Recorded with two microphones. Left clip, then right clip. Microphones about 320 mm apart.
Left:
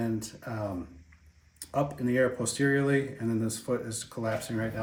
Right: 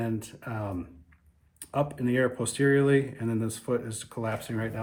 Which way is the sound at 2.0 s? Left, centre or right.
Right.